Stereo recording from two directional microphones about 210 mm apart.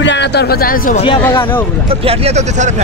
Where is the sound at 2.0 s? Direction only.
30° right (ahead or behind).